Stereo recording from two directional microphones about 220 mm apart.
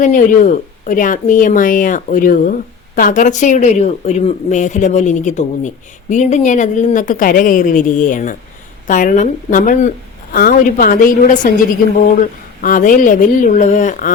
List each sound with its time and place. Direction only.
0.0 s speech: 35° left (ahead or behind)